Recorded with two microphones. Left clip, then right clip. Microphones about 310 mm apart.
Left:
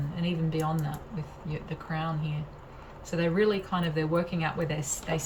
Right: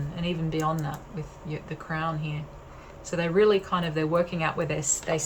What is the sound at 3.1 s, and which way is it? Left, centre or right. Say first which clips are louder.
Speech: right 5 dB; centre.